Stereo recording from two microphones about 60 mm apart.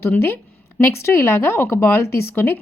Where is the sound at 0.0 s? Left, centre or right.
Left.